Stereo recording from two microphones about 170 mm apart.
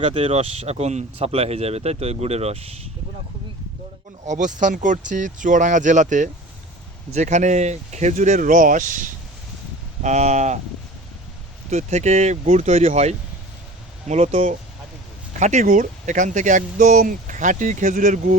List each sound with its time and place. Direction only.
0.0 s speech: 35° right (ahead or behind)
4.3 s speech: 45° right (ahead or behind)
11.7 s speech: 40° right (ahead or behind)